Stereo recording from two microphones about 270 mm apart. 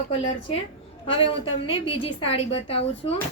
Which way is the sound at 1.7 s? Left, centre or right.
Centre.